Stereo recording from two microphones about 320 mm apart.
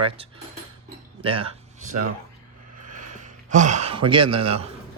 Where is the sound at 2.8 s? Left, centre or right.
Right.